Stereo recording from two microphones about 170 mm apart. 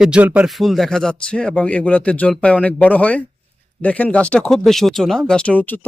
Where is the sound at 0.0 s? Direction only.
5° right (ahead or behind).